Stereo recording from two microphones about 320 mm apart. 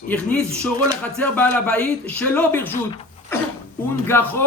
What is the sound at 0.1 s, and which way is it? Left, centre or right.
A man's voice, centre.